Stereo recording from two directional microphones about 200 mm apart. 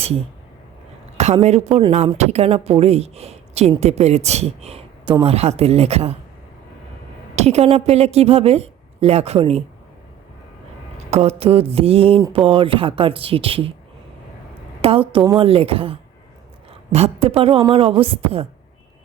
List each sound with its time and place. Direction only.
1.1 s speech: 30° right (ahead or behind)
7.3 s a woman's voice: 30° right (ahead or behind)
11.1 s speech: 30° right (ahead or behind)
14.8 s speech: 30° right (ahead or behind)